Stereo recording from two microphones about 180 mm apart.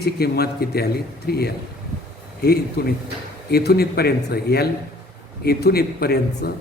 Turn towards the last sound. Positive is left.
turn(degrees=60)  # may be behind; listen again after turning